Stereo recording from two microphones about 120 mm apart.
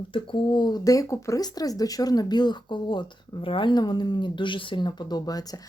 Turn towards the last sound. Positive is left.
turn(degrees=35)  # may be behind; listen again after turning